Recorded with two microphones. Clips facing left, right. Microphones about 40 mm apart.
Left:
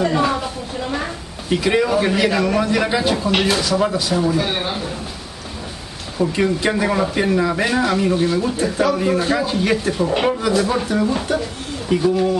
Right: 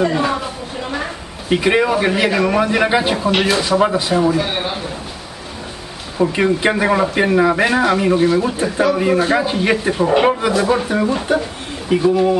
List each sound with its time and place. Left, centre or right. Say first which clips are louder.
0.0 s a sound: right 1 dB; centre
1.5 s speech: right 2 dB; right
3.3 s speech: right 3 dB; centre
3.6 s speech: right 3 dB; right; by 4.9 s centre
6.1 s speech: right 3 dB; centre